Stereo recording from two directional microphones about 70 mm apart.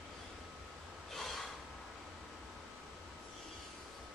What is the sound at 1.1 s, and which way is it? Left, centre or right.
Snort, centre.